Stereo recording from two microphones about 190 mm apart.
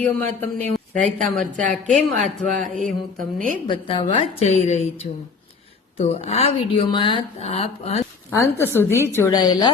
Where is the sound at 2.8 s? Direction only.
5° left (ahead or behind).